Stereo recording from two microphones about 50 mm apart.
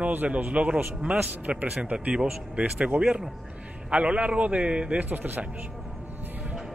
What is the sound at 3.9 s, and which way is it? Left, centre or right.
A man's voice, right.